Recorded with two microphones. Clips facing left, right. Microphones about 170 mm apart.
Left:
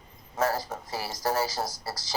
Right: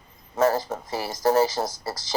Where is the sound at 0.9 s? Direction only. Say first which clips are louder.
Right 7 dB; 20° right (ahead or behind).